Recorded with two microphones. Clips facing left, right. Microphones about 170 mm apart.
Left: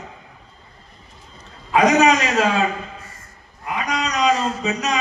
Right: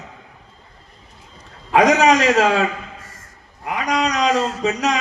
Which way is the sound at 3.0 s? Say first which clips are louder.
Left 1 dB; 90° right.